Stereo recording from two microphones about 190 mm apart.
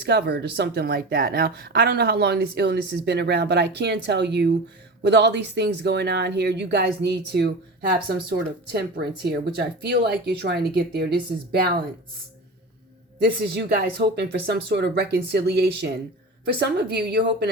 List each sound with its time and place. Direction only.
0.0 s speech: 60° right (ahead or behind)
13.2 s speech: 60° right (ahead or behind)